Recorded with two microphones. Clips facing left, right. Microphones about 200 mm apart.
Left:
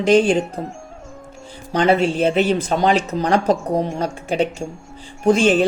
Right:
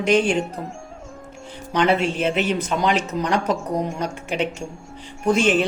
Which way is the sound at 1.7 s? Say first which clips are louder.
Left 3 dB; 35° left (ahead or behind).